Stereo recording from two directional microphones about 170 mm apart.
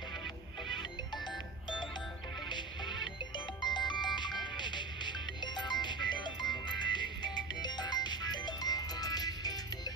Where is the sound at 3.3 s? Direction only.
25° left (ahead or behind).